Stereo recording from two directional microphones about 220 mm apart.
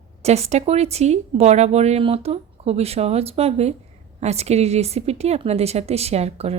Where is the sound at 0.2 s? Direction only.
30° right (ahead or behind).